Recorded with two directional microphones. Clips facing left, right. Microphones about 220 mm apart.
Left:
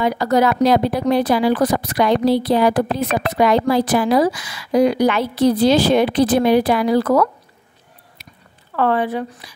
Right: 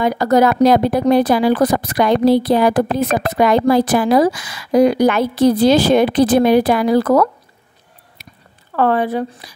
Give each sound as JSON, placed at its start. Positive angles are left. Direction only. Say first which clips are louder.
{"t": 0.0, "sound": "speech", "louder": "right 3 dB", "side_deg": -45}
{"t": 8.7, "sound": "speech", "louder": "right 2 dB", "side_deg": -40}